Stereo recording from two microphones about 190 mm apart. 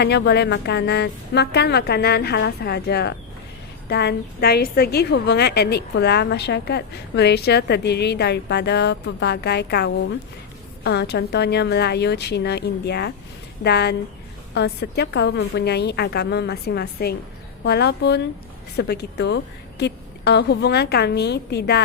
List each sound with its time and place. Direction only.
0.0 s a woman's voice: 60° left (ahead or behind)